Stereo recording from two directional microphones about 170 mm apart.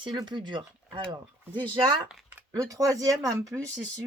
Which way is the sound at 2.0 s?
10° right (ahead or behind).